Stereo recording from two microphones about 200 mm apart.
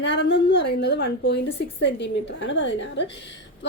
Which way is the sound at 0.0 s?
60° left (ahead or behind).